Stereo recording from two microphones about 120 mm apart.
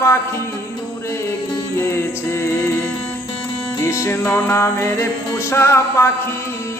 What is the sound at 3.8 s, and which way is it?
Music, 25° left (ahead or behind).